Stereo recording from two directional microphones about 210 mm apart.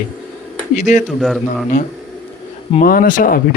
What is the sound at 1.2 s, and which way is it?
Speech, centre (ahead or behind).